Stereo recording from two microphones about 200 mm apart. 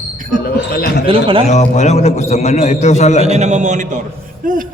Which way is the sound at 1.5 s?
35° left (ahead or behind).